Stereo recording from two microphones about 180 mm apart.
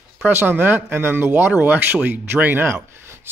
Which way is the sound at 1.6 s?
10° right (ahead or behind).